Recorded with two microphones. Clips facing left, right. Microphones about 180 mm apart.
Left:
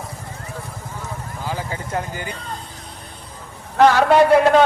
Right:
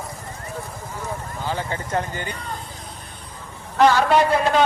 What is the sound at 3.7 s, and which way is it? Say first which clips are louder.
Speech: left 3 dB; 60° left (ahead or behind).